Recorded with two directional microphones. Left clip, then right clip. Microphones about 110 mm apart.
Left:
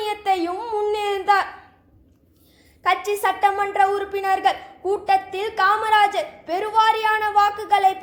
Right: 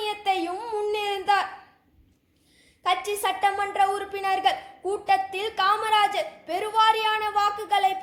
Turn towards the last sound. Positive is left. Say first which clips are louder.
# left 5 dB
turn(degrees=-5)  # may be behind; listen again after turning